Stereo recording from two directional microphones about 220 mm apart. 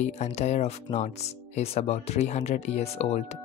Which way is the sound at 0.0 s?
30° left (ahead or behind).